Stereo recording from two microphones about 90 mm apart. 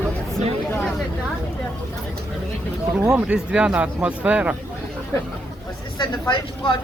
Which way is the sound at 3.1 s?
15° right (ahead or behind).